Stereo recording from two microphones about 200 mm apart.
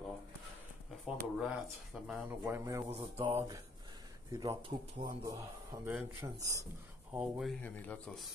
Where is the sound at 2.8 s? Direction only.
30° right (ahead or behind).